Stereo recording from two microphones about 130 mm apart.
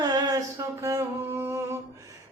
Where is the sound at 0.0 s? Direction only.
30° right (ahead or behind).